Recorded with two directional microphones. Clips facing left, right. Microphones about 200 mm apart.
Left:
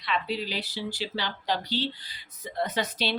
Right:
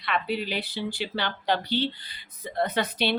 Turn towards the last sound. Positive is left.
turn(degrees=-55)  # may be behind; listen again after turning